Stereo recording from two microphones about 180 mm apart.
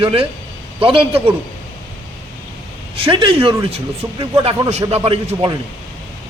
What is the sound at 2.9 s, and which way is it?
A man's voice, 30° right (ahead or behind).